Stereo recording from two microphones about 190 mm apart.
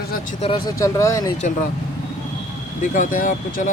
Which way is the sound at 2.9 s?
45° left (ahead or behind).